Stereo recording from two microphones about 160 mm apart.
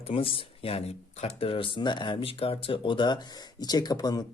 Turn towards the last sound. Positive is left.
turn(degrees=25)  # may be behind; listen again after turning